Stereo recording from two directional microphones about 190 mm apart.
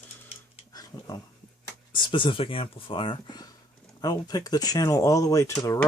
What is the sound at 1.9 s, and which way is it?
Speech, 25° left (ahead or behind).